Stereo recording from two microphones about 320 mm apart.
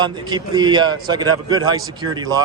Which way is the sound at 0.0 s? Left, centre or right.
Centre.